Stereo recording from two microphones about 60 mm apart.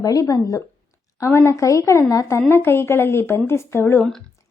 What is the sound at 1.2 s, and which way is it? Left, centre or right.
A woman's voice, left.